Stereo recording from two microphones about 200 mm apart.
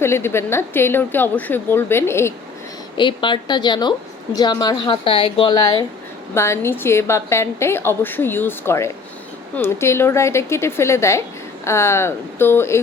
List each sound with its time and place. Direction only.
0.0 s a woman's voice: 10° left (ahead or behind)
3.0 s a woman's voice: 25° left (ahead or behind)